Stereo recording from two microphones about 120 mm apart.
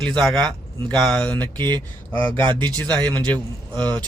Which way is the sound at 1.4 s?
35° right (ahead or behind).